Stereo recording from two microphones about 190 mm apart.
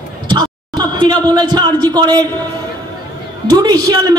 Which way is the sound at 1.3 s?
20° right (ahead or behind).